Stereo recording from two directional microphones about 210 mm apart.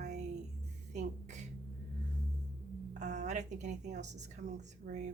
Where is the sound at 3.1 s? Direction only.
35° right (ahead or behind).